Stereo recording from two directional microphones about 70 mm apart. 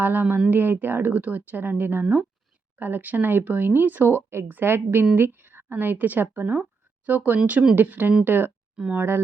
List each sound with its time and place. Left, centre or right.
0.0 s a woman's voice: right
8.7 s speech: centre
9.0 s speech: right